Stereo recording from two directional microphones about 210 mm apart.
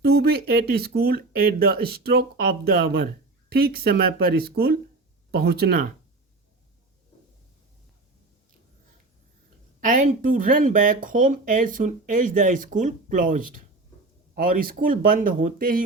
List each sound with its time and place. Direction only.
0.0 s speech: 50° right (ahead or behind)
9.8 s speech: 40° right (ahead or behind)